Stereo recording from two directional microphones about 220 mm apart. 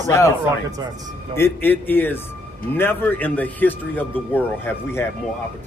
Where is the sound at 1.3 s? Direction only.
10° left (ahead or behind).